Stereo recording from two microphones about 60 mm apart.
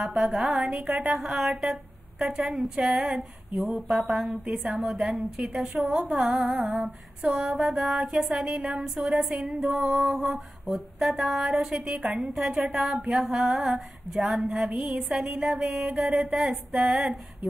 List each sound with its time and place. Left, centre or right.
0.1 s speech: centre
16.7 s speech: centre